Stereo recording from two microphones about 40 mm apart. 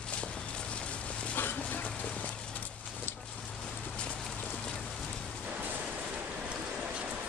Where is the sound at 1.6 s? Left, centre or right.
Left.